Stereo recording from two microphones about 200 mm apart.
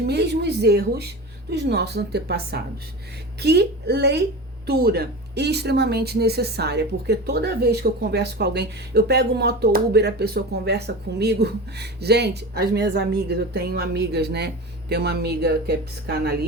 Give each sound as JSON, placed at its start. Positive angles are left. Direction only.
{"t": 0.0, "sound": "speech", "side_deg": -55}